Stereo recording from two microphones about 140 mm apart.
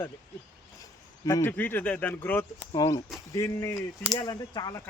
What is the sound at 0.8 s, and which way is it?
Speech, 25° left (ahead or behind).